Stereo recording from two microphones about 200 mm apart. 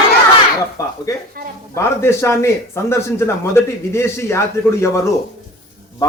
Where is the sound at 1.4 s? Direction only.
45° right (ahead or behind).